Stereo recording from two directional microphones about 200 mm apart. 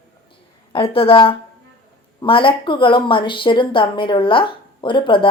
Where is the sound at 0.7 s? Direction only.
30° left (ahead or behind).